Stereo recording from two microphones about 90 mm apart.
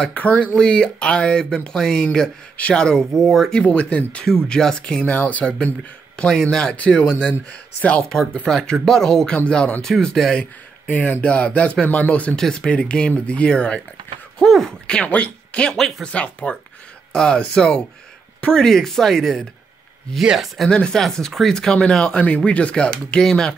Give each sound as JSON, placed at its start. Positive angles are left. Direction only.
{"t": 0.0, "sound": "speech", "side_deg": 15}
{"t": 6.1, "sound": "speech", "side_deg": 5}
{"t": 10.9, "sound": "speech", "side_deg": 15}